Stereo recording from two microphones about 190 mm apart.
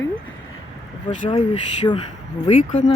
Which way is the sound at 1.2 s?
30° left (ahead or behind).